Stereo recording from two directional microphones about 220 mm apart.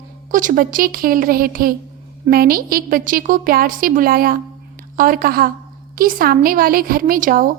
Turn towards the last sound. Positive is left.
turn(degrees=-40)  # may be behind; listen again after turning